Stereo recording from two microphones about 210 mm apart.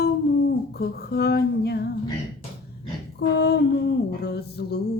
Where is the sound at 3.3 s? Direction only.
50° left (ahead or behind).